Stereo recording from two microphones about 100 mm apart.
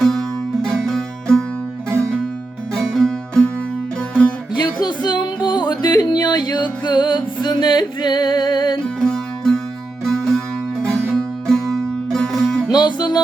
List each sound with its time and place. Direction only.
0.0 s music: 5° left (ahead or behind)
2.7 s music: 5° left (ahead or behind)
4.5 s music: 45° left (ahead or behind)
9.0 s music: 5° left (ahead or behind)
12.7 s music: 45° left (ahead or behind)